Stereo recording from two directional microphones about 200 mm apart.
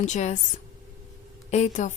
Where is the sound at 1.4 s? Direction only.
35° left (ahead or behind).